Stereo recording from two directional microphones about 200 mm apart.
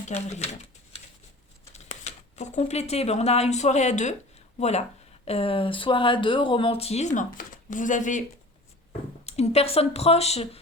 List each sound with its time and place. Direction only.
0.1 s speech: 35° left (ahead or behind)
1.7 s speech: 35° left (ahead or behind)
9.2 s speech: 30° left (ahead or behind)